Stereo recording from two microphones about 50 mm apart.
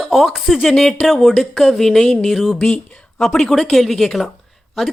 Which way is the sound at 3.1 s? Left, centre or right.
Centre.